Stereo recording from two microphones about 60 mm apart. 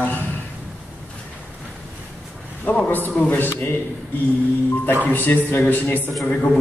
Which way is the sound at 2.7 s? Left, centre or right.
Left.